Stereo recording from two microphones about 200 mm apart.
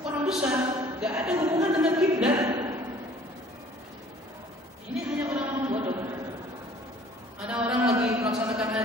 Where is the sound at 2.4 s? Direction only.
15° right (ahead or behind).